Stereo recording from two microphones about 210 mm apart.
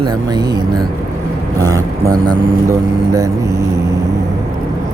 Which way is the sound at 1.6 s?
15° right (ahead or behind).